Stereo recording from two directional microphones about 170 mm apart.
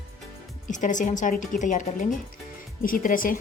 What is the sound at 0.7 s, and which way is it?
A woman's voice, 45° left (ahead or behind).